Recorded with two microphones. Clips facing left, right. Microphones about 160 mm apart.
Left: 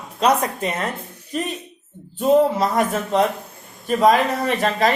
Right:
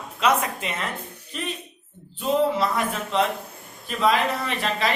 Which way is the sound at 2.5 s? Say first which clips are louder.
Left 5 dB; 45° left (ahead or behind).